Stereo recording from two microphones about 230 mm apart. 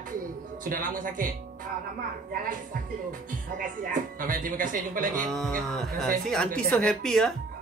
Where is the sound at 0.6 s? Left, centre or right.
Right.